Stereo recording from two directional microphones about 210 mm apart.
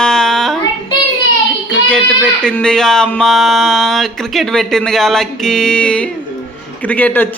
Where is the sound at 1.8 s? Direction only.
5° left (ahead or behind).